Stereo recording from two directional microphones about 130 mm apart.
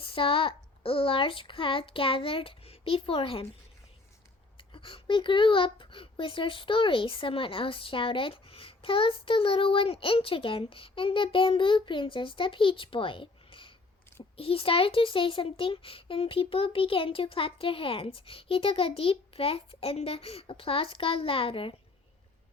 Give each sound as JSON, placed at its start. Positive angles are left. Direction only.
{"t": 0.0, "sound": "speech", "side_deg": 45}
{"t": 4.5, "sound": "a child's voice", "side_deg": 40}